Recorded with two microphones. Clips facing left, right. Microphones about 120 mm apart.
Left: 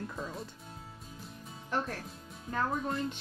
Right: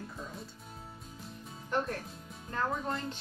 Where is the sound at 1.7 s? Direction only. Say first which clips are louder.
Right 2 dB; centre (ahead or behind).